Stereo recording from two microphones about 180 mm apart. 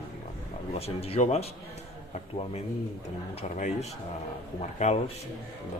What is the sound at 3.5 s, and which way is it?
Speech, 40° left (ahead or behind).